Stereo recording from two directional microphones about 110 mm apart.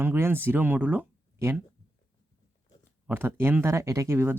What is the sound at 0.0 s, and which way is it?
Speech, 20° right (ahead or behind).